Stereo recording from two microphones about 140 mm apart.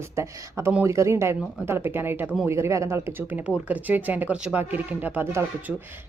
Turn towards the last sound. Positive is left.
turn(degrees=-15)  # may be behind; listen again after turning